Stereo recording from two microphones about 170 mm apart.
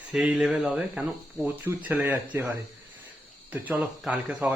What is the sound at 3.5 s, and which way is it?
Speech, 10° right (ahead or behind).